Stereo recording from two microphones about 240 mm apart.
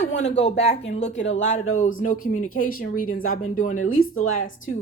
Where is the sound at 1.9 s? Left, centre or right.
Left.